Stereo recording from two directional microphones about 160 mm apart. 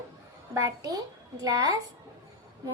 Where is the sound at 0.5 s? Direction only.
20° right (ahead or behind).